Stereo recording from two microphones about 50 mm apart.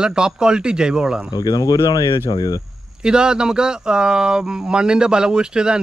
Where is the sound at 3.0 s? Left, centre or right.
Centre.